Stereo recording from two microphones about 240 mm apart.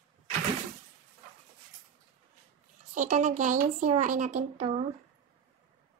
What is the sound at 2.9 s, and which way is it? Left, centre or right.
A woman's voice, right.